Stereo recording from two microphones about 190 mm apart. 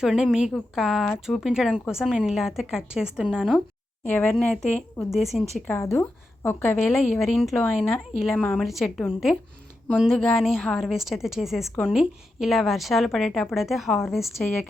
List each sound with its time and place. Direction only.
0.0 s a woman's voice: centre (ahead or behind)
4.0 s a woman's voice: 10° left (ahead or behind)
5.6 s a woman's voice: 15° left (ahead or behind)
7.2 s a woman's voice: centre (ahead or behind)